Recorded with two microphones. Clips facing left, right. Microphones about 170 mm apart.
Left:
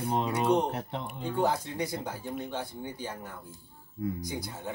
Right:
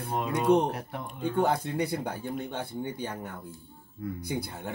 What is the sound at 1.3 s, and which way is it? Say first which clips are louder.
Speech: right 2 dB; 60° right (ahead or behind).